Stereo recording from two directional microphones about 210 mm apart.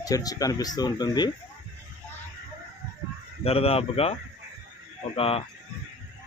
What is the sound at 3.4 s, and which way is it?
Speech, 30° left (ahead or behind).